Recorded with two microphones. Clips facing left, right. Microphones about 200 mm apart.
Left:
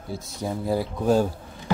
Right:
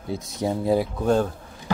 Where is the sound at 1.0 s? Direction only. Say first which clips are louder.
Left 1 dB; 5° left (ahead or behind).